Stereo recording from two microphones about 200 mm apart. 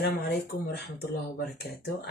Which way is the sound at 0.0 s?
50° left (ahead or behind).